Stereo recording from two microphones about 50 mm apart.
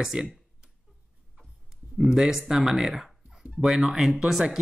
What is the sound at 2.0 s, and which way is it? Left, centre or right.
Speech, centre.